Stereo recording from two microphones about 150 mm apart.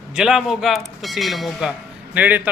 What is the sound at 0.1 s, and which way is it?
Speech, 5° right (ahead or behind).